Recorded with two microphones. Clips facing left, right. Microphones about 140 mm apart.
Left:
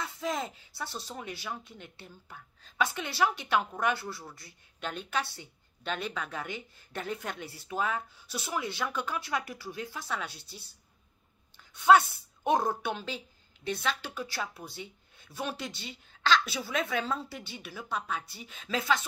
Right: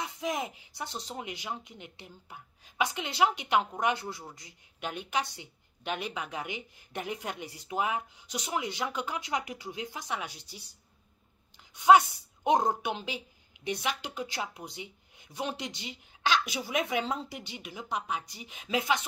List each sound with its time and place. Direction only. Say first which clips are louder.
0.0 s speech: even; 15° right (ahead or behind)
11.7 s speech: right 1 dB; 15° right (ahead or behind)